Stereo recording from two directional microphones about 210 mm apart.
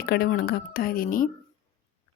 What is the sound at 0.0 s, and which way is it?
Speech, 45° left (ahead or behind).